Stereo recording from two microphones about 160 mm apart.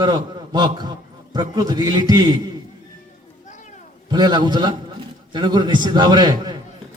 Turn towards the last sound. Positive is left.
turn(degrees=-25)  # may be behind; listen again after turning